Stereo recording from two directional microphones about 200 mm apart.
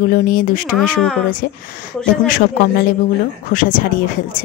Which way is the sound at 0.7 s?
Centre (ahead or behind).